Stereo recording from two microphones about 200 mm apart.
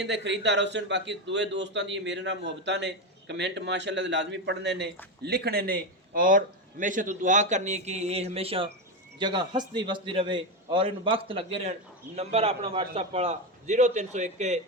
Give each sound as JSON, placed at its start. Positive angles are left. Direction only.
{"t": 0.0, "sound": "a man's voice", "side_deg": -60}